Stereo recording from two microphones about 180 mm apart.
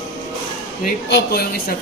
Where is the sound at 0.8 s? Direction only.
60° left (ahead or behind).